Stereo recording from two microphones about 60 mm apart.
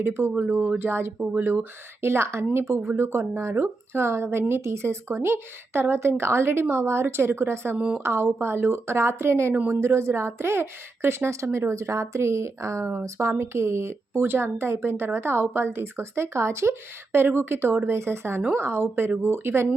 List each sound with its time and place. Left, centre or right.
0.0 s a woman's voice: right
1.2 s speech: right
1.5 s speech: right
11.4 s a woman's voice: right
11.7 s a woman's voice: right